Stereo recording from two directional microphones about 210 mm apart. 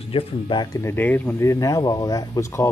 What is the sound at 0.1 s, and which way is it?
Speech, 20° left (ahead or behind).